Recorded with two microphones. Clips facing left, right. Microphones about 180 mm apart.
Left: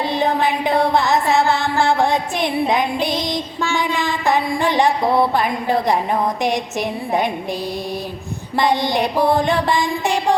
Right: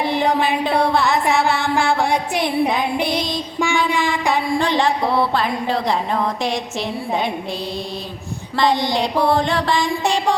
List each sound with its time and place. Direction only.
0.4 s a sound: 20° left (ahead or behind)
3.8 s mantra: 20° left (ahead or behind)
8.9 s mantra: 15° left (ahead or behind)